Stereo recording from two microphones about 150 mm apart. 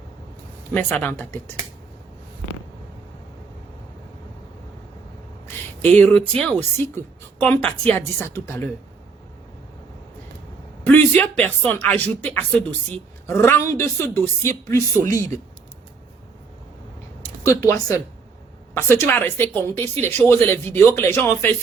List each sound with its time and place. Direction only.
0.7 s speech: 10° left (ahead or behind)
5.9 s speech: 10° left (ahead or behind)
10.8 s a man's voice: 10° left (ahead or behind)
17.6 s speech: 20° left (ahead or behind)